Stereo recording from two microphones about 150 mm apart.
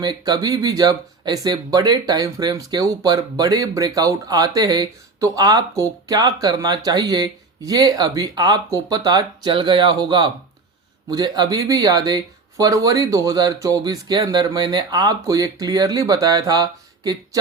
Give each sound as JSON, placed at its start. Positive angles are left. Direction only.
{"t": 0.0, "sound": "speech", "side_deg": -30}